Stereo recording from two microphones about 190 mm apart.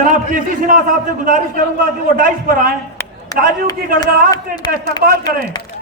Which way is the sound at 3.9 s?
50° right (ahead or behind).